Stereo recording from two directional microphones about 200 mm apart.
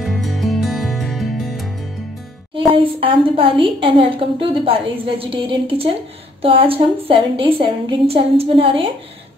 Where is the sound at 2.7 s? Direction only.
25° right (ahead or behind).